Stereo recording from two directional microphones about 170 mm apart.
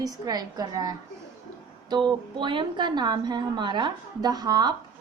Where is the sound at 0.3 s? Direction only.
25° right (ahead or behind).